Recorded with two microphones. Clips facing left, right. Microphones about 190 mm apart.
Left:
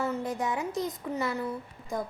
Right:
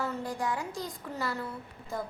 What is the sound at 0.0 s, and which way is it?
A woman's voice, 20° left (ahead or behind).